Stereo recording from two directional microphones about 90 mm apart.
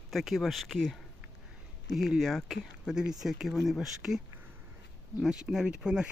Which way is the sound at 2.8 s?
10° right (ahead or behind).